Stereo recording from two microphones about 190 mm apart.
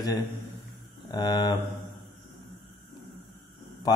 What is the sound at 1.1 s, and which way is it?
Speech, 20° left (ahead or behind).